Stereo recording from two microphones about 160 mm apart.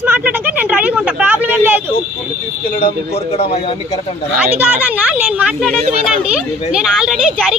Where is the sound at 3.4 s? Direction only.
35° left (ahead or behind).